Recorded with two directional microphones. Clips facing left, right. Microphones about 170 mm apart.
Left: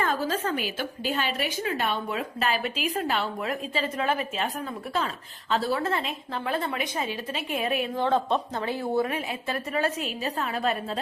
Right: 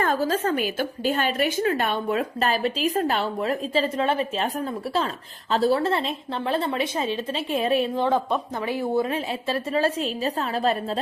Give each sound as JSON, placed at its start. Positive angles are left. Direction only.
{"t": 0.0, "sound": "a woman's voice", "side_deg": -45}
{"t": 8.6, "sound": "a woman's voice", "side_deg": -15}